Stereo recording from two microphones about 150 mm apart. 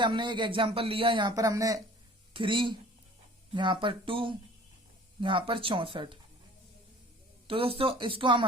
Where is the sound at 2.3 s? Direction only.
35° right (ahead or behind).